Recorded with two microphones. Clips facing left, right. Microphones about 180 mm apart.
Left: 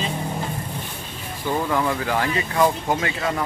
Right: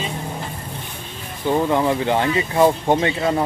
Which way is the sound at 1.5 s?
20° right (ahead or behind).